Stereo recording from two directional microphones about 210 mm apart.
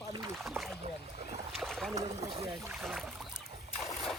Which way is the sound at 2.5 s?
Centre (ahead or behind).